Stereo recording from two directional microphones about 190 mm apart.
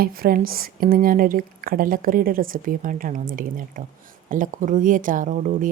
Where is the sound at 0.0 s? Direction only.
50° right (ahead or behind).